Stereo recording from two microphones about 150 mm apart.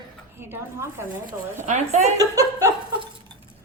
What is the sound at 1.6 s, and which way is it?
Speech, 50° right (ahead or behind).